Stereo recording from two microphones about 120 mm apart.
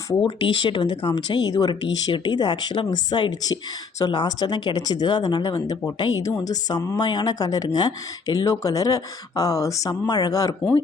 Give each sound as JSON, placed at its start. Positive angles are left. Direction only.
{"t": 0.3, "sound": "speech", "side_deg": 45}